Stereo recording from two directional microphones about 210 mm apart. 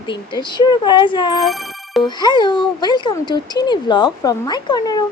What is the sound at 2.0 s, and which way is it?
Speech, 20° left (ahead or behind).